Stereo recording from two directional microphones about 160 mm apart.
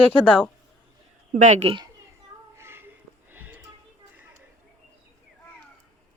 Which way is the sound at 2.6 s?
15° right (ahead or behind).